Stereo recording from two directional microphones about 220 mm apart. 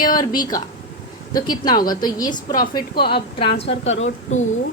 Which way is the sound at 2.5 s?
40° left (ahead or behind).